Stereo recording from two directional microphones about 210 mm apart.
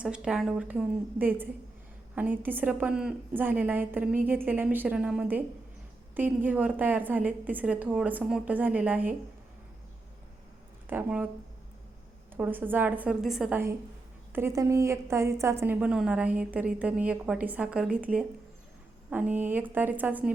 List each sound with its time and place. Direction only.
0.0 s a woman's voice: 5° right (ahead or behind)
10.8 s speech: 10° right (ahead or behind)
12.3 s a woman's voice: 10° right (ahead or behind)